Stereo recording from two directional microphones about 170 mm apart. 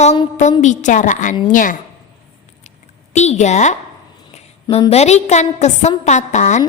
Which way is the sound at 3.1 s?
40° left (ahead or behind).